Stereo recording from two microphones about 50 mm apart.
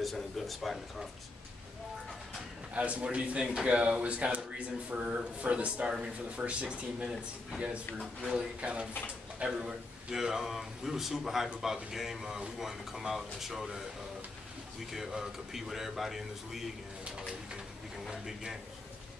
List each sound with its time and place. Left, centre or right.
0.0 s speech: centre
2.7 s speech: right
8.0 s a man's voice: centre
8.5 s speech: right
9.6 s a man's voice: centre
14.9 s speech: centre
18.1 s a man's voice: centre